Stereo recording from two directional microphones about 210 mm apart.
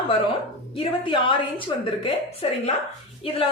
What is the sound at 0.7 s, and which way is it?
A woman's voice, 25° left (ahead or behind).